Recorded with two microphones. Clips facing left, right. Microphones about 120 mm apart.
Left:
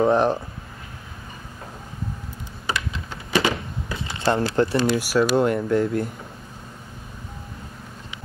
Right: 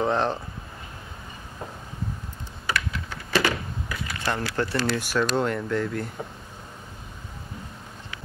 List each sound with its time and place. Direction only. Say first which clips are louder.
0.0 s speech: left 6 dB; 15° left (ahead or behind)
2.6 s a sound: even; 15° left (ahead or behind)
4.5 s speech: left 6 dB; 20° left (ahead or behind)